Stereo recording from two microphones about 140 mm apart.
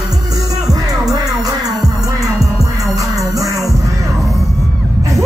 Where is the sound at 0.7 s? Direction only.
25° right (ahead or behind).